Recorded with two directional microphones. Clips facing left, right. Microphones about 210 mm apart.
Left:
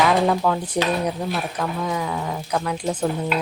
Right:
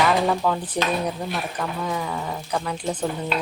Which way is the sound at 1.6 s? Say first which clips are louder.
Left 2 dB; 5° left (ahead or behind).